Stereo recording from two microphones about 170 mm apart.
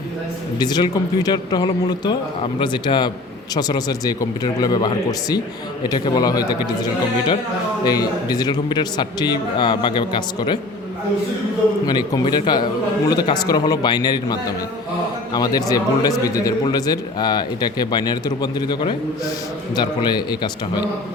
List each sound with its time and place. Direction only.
0.6 s a man's voice: 25° left (ahead or behind)
7.9 s a man's voice: 25° left (ahead or behind)
11.9 s a man's voice: 25° left (ahead or behind)